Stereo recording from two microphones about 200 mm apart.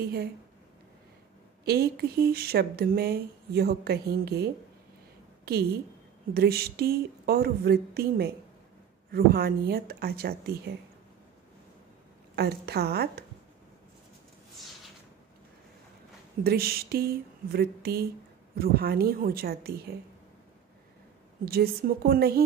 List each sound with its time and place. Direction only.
1.6 s a woman's voice: 50° right (ahead or behind)
12.4 s speech: 55° right (ahead or behind)
16.4 s speech: 50° right (ahead or behind)
21.5 s speech: 50° right (ahead or behind)